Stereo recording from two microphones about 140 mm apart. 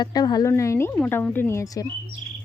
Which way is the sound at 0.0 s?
30° left (ahead or behind).